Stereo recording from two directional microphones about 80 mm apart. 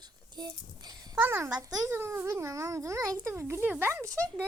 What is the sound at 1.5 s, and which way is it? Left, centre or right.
Speech, right.